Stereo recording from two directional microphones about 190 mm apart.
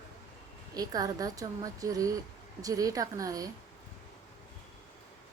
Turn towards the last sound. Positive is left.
turn(degrees=-20)  # may be behind; listen again after turning